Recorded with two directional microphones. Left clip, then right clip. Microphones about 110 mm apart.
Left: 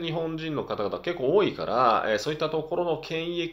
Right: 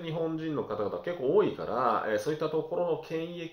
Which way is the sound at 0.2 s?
20° left (ahead or behind).